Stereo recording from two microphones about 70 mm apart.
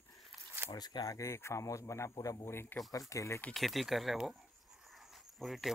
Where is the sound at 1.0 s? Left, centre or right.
Left.